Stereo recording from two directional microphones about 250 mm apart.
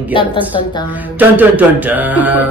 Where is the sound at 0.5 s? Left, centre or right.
Centre.